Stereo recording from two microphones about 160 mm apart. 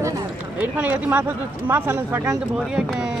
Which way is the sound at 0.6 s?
10° right (ahead or behind).